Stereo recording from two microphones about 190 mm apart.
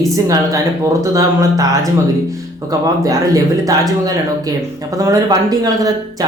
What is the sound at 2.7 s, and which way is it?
Speech, 20° right (ahead or behind).